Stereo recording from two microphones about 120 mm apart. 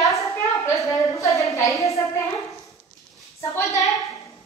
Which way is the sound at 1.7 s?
25° left (ahead or behind).